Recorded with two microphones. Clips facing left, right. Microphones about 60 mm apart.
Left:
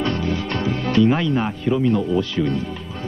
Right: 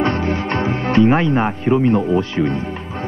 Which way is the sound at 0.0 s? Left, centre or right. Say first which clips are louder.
Right 4 dB; right.